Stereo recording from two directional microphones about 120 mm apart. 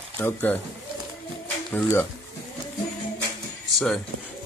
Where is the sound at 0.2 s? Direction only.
15° left (ahead or behind).